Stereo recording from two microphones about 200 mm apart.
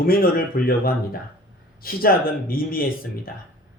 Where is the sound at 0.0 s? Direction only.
45° left (ahead or behind).